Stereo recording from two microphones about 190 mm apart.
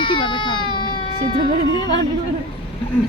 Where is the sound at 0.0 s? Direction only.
25° left (ahead or behind).